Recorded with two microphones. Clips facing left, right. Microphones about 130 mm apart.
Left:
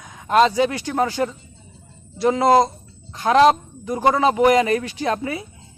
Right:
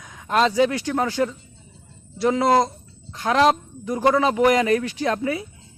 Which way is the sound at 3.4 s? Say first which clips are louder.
Left 4 dB; 15° left (ahead or behind).